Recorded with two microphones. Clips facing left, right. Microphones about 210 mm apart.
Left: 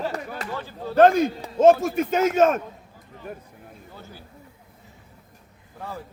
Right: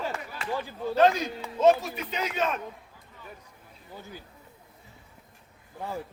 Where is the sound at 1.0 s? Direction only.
50° left (ahead or behind).